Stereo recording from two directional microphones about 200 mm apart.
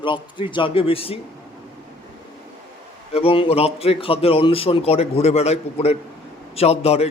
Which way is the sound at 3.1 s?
30° left (ahead or behind).